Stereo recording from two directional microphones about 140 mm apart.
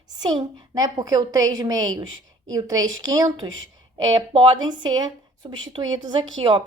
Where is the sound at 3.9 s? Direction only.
40° right (ahead or behind).